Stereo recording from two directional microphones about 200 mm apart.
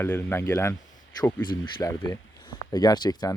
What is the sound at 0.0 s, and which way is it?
Speech, 10° left (ahead or behind).